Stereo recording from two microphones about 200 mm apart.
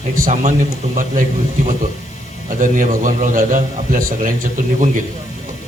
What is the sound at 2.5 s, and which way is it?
Speech, 40° right (ahead or behind).